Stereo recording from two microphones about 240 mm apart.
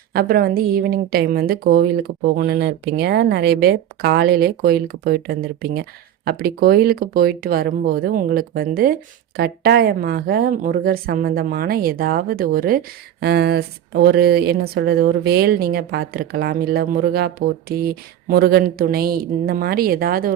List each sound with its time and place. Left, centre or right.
0.1 s a woman's voice: right